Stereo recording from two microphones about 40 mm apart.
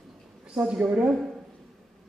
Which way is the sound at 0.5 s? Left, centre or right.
Right.